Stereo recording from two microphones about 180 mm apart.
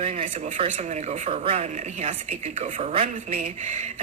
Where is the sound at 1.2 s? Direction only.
35° right (ahead or behind).